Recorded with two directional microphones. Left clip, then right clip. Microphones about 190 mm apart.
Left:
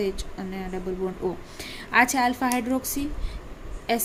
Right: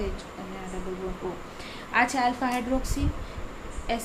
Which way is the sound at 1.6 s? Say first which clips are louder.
Left 4 dB; 55° left (ahead or behind).